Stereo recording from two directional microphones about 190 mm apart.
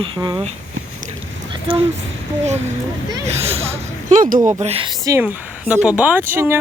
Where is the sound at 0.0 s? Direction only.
25° right (ahead or behind).